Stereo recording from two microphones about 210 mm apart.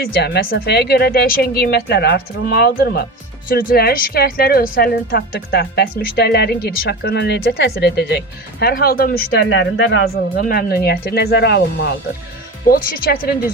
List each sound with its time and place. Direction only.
0.0 s speech: 50° left (ahead or behind)
10.3 s speech: 45° left (ahead or behind)